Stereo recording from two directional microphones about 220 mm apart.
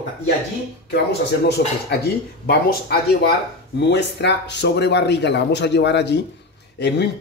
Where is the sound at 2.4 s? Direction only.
45° left (ahead or behind).